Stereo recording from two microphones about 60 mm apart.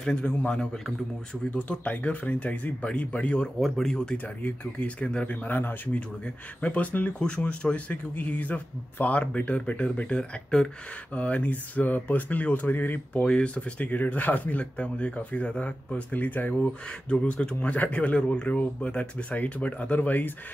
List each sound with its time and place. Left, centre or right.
0.0 s a man's voice: centre
3.5 s speech: centre
3.8 s a man's voice: centre
4.4 s speech: left
10.5 s a man's voice: centre
11.1 s speech: left
13.2 s speech: centre
17.1 s speech: centre